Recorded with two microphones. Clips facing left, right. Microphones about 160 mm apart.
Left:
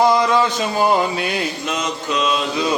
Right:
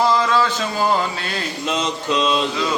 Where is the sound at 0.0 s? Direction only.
15° left (ahead or behind).